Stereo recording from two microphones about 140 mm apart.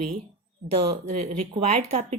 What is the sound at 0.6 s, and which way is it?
Speech, 35° right (ahead or behind).